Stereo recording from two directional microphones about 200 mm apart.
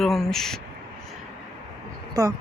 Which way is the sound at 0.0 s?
Centre (ahead or behind).